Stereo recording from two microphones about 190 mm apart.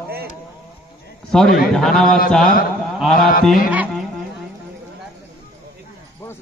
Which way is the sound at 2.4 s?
50° left (ahead or behind).